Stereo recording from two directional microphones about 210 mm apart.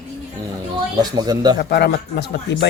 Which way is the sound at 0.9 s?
20° right (ahead or behind).